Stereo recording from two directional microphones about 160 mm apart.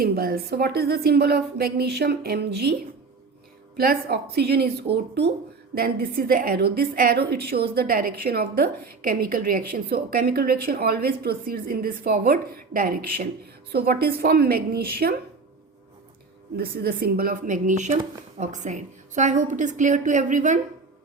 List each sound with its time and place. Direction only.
0.0 s a woman's voice: 65° right (ahead or behind); by 2.7 s 90° right
3.8 s speech: 80° right
5.7 s a woman's voice: 70° right (ahead or behind)
7.8 s a woman's voice: 65° right (ahead or behind)
13.7 s a woman's voice: 75° right (ahead or behind)
16.6 s speech: 70° right (ahead or behind); by 20.6 s 50° right (ahead or behind)